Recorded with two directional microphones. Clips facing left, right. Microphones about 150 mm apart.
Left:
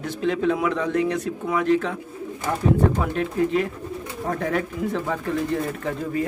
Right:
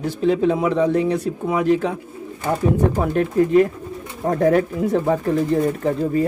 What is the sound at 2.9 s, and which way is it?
A man's voice, 40° right (ahead or behind).